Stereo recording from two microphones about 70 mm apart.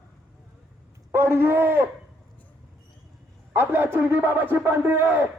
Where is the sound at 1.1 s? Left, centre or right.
Right.